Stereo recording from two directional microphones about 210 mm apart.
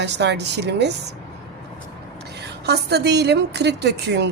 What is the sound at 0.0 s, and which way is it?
Speech, 55° right (ahead or behind).